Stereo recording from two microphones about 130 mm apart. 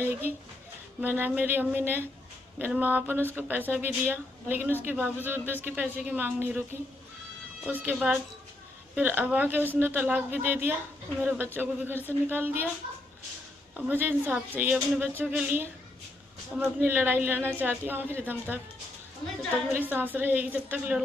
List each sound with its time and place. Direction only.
1.0 s a woman's voice: 15° right (ahead or behind)
7.6 s a woman's voice: 10° right (ahead or behind)
13.7 s a woman's voice: 15° right (ahead or behind)
19.7 s a woman's voice: 15° right (ahead or behind)